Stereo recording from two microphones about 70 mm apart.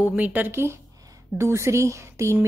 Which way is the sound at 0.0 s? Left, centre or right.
Right.